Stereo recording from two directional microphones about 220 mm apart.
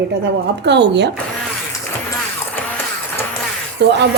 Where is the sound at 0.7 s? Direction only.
50° right (ahead or behind).